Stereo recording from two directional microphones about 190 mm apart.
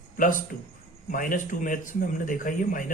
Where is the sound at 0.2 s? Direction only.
45° left (ahead or behind).